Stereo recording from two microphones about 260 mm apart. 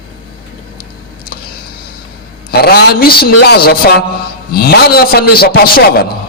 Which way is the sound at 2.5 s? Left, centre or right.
Left.